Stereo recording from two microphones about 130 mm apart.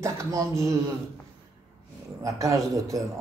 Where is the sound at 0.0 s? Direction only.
25° right (ahead or behind).